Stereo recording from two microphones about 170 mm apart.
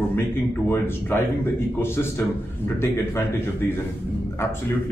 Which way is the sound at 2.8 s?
15° left (ahead or behind).